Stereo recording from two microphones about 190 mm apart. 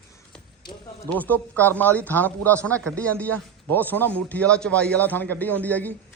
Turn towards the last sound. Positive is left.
turn(degrees=10)  # may be behind; listen again after turning